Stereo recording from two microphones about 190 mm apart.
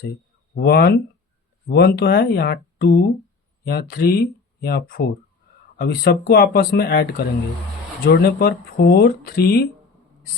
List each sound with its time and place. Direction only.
0.5 s speech: 55° left (ahead or behind)